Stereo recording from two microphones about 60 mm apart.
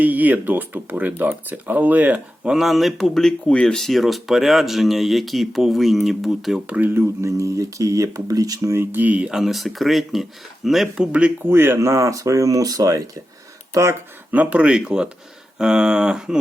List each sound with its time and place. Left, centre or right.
0.0 s speech: right
2.4 s speech: centre
3.5 s speech: centre
3.8 s speech: centre
6.7 s speech: right
6.9 s speech: right
8.6 s speech: right
9.3 s speech: centre
10.9 s speech: centre
11.4 s speech: right
11.8 s speech: right
13.7 s speech: right
14.3 s speech: right